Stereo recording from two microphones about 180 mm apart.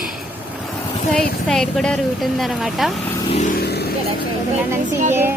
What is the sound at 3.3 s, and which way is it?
Vehicle, 35° left (ahead or behind).